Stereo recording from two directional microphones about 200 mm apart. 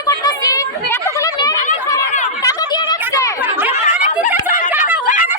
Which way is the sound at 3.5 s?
10° right (ahead or behind).